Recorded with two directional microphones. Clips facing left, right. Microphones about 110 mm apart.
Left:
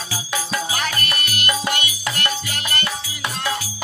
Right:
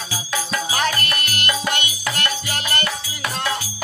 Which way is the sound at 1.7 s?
25° right (ahead or behind).